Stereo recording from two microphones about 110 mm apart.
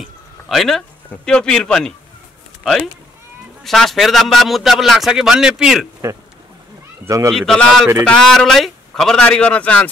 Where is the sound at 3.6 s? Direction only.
Centre (ahead or behind).